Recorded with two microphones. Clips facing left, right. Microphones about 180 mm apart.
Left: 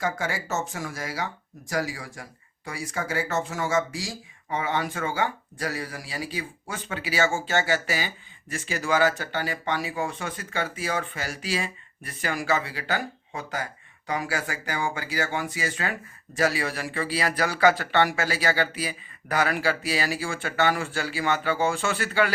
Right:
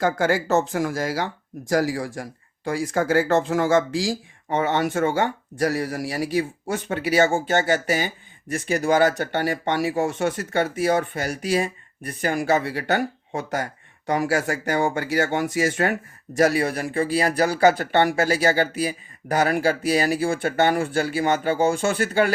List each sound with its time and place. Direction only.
0.0 s speech: 60° right (ahead or behind); by 0.9 s 75° right (ahead or behind)
2.7 s speech: 75° right (ahead or behind); by 3.6 s 60° right (ahead or behind)
3.6 s speech: 90° right
4.6 s speech: 70° right (ahead or behind)
16.5 s speech: 50° right (ahead or behind)